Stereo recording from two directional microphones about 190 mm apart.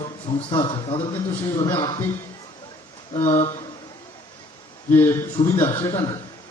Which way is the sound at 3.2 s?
35° left (ahead or behind).